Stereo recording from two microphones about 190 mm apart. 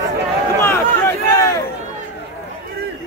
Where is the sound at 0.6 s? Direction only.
15° left (ahead or behind).